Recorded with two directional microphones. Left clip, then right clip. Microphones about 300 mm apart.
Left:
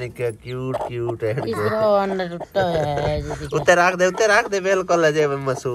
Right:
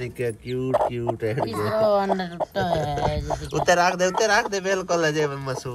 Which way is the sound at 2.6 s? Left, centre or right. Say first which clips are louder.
Left 2 dB; centre.